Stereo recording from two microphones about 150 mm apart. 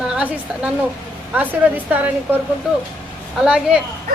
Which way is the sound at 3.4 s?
5° right (ahead or behind).